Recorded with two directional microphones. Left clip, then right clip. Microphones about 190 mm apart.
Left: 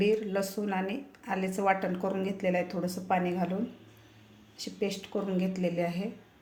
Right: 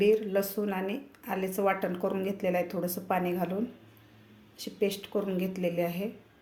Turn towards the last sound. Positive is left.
turn(degrees=-10)  # may be behind; listen again after turning